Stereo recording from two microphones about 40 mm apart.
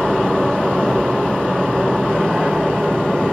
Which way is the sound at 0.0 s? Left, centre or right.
Centre.